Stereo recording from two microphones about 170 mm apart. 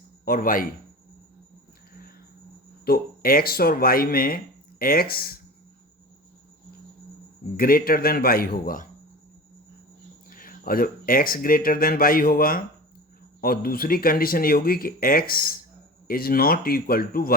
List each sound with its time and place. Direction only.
0.3 s speech: 55° left (ahead or behind)
2.8 s speech: 65° left (ahead or behind)
7.5 s speech: 60° left (ahead or behind)
10.2 s speech: 55° left (ahead or behind)